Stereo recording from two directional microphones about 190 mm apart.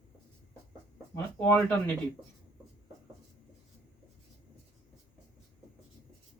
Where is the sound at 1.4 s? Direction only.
10° left (ahead or behind).